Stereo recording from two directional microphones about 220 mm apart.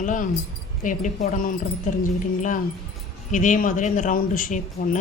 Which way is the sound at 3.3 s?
35° left (ahead or behind).